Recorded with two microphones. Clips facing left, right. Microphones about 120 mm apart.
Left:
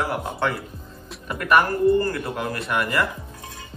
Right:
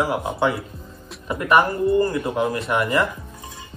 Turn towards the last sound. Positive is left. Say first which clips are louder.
# right 3 dB
turn(degrees=-20)  # may be behind; listen again after turning